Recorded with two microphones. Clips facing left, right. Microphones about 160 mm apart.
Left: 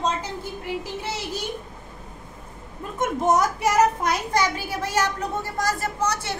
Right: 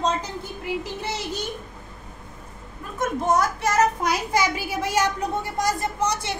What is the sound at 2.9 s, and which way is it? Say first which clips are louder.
Speech: left 1 dB; 20° left (ahead or behind).